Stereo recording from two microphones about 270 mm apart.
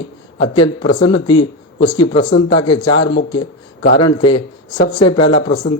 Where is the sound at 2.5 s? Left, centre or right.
Centre.